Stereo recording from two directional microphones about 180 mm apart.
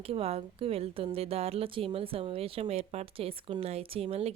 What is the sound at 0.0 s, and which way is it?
A woman's voice, 35° right (ahead or behind).